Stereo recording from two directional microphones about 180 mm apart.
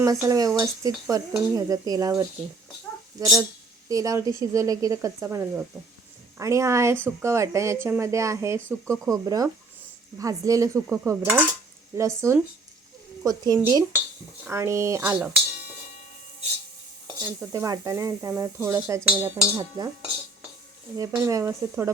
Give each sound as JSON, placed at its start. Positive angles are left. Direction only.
{"t": 0.0, "sound": "speech", "side_deg": -20}
{"t": 6.4, "sound": "speech", "side_deg": -15}
{"t": 17.2, "sound": "speech", "side_deg": -15}
{"t": 20.9, "sound": "speech", "side_deg": -20}